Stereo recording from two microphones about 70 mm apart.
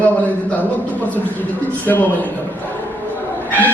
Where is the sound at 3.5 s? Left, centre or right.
Left.